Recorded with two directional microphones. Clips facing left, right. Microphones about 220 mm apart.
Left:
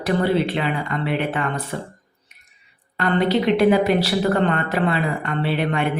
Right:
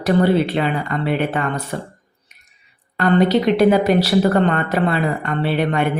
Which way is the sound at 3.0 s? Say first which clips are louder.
Right 4 dB; 40° right (ahead or behind).